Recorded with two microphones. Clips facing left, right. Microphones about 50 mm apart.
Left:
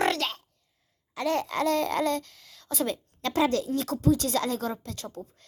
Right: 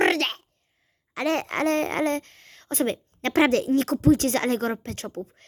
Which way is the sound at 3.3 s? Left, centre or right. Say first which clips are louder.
Right 5 dB; right.